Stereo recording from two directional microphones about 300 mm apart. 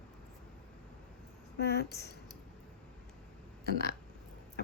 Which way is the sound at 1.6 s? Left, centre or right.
Left.